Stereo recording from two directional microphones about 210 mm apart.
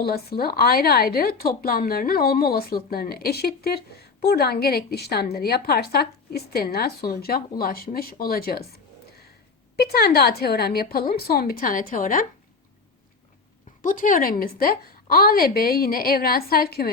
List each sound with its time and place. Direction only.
0.0 s a woman's voice: 45° left (ahead or behind)
13.8 s a woman's voice: 40° left (ahead or behind)